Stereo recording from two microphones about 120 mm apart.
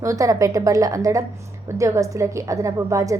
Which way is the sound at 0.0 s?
25° right (ahead or behind).